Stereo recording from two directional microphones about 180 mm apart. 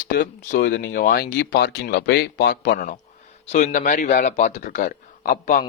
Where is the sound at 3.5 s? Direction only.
40° left (ahead or behind).